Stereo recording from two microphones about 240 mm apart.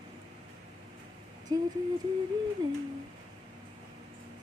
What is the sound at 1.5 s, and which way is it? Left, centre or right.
Speech, centre.